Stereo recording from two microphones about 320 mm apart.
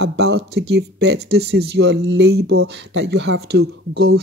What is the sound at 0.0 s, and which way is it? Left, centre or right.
Speech, right.